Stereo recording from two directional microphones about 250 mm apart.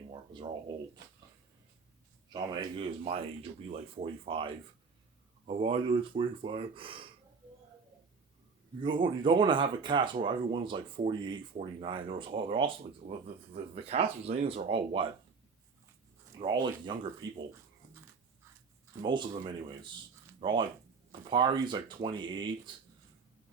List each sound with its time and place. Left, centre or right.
2.3 s speech: centre
8.8 s speech: centre
16.4 s speech: centre
19.0 s speech: centre
20.4 s speech: centre